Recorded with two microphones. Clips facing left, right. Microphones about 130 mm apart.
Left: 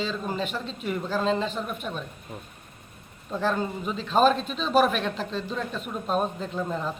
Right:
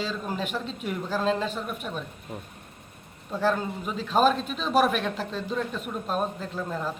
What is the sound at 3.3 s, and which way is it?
A man's voice, 5° right (ahead or behind).